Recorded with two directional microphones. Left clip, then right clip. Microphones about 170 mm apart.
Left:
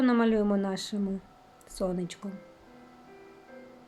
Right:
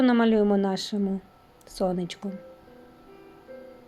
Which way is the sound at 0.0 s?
15° right (ahead or behind).